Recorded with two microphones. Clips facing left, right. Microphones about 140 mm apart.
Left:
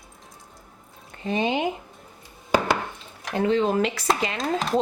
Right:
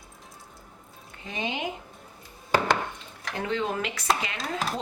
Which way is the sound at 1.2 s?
40° left (ahead or behind).